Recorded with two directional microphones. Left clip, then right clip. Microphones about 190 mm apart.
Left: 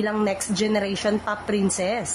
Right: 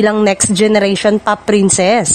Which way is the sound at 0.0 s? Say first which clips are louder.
Right 12 dB; 55° right (ahead or behind).